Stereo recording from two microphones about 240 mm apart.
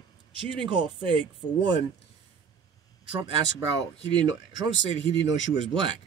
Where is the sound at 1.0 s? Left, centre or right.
Right.